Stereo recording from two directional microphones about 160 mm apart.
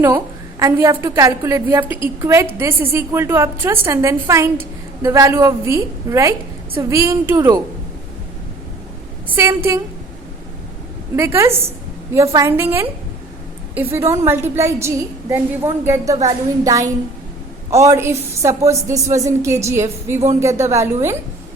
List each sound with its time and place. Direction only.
0.6 s a woman's voice: 20° right (ahead or behind)
9.3 s a woman's voice: 15° right (ahead or behind)
11.2 s a woman's voice: 15° right (ahead or behind)